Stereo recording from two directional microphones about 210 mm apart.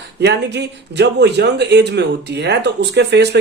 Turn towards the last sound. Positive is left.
turn(degrees=-55)  # may be behind; listen again after turning